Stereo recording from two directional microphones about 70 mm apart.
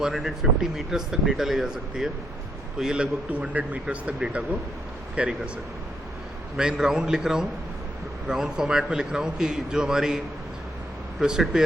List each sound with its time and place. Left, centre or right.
0.0 s a man's voice: centre
6.6 s a man's voice: centre
11.2 s a man's voice: centre